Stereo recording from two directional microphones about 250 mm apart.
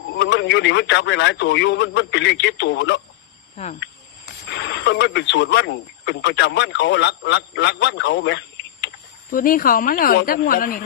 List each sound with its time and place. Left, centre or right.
0.1 s speech: left
3.5 s speech: left
4.4 s speech: left
9.3 s a woman's voice: left